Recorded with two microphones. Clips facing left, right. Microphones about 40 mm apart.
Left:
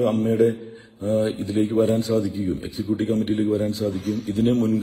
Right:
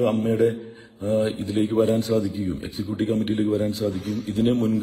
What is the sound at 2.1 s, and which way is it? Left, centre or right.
Speech, centre.